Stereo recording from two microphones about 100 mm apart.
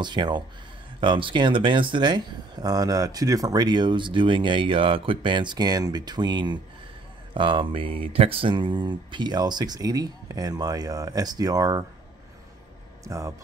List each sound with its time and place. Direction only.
0.0 s speech: 50° right (ahead or behind)
13.0 s speech: 30° right (ahead or behind)